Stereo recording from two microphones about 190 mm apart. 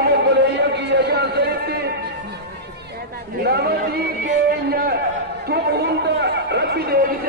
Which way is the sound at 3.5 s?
60° right (ahead or behind).